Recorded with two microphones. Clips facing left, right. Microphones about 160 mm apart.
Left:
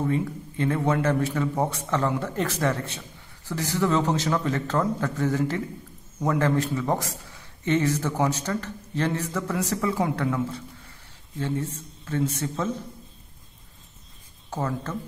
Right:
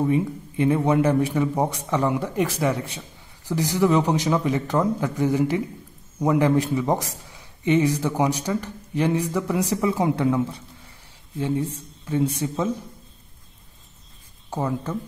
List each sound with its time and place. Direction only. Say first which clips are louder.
0.0 s a man's voice: right 4 dB; 15° right (ahead or behind)
14.5 s a man's voice: right 3 dB; 15° right (ahead or behind)